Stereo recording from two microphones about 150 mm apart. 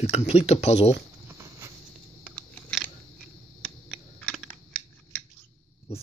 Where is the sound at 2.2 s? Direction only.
5° left (ahead or behind).